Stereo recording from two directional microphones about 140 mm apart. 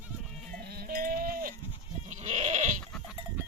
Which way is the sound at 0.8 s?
90° right.